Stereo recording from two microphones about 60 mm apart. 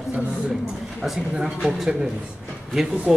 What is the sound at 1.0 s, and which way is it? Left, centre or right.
Speech, centre.